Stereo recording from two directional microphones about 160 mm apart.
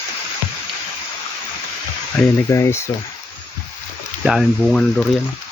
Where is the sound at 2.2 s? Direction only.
20° left (ahead or behind).